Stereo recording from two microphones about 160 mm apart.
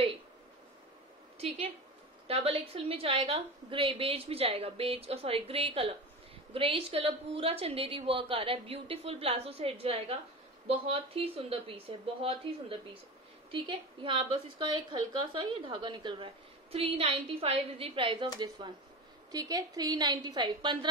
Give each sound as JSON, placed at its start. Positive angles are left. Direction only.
{"t": 2.2, "sound": "a woman's voice", "side_deg": -35}